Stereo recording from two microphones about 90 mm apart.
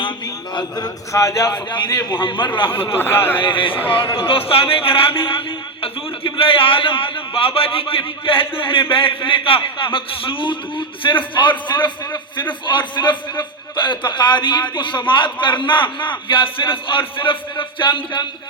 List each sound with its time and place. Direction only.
1.1 s a man's voice: 35° left (ahead or behind)
1.7 s a man's voice: 50° left (ahead or behind)
2.2 s a man's voice: 60° left (ahead or behind)
3.0 s speech: 25° left (ahead or behind)
3.4 s a man's voice: 70° left (ahead or behind)
4.2 s speech: 90° left
5.8 s a man's voice: 75° left (ahead or behind)